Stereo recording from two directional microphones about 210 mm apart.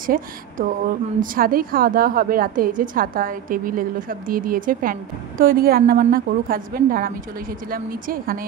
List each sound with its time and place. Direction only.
0.0 s a woman's voice: 40° right (ahead or behind)